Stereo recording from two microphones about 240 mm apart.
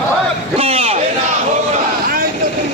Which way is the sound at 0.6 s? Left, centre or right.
Right.